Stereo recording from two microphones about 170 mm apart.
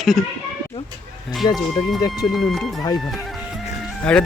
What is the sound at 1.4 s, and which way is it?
Speech, 25° left (ahead or behind).